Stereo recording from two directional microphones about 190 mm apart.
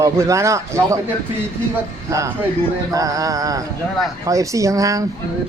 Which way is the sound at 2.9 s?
20° right (ahead or behind).